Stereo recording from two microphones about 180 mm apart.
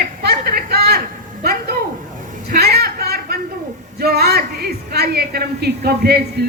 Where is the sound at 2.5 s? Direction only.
60° right (ahead or behind).